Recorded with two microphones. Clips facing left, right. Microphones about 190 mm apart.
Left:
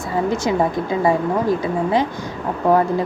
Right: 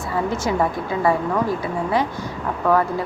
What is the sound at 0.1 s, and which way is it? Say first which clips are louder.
A woman's voice: left 3 dB; 15° left (ahead or behind).